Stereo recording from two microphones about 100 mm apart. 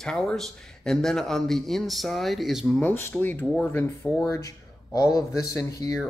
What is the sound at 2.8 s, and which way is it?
Speech, 20° left (ahead or behind).